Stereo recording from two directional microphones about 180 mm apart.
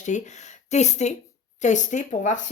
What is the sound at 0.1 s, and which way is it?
Speech, 40° left (ahead or behind).